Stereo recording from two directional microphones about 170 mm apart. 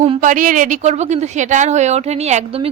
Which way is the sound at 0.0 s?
40° right (ahead or behind).